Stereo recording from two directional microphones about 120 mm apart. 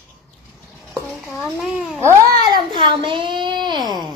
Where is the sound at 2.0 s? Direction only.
20° right (ahead or behind).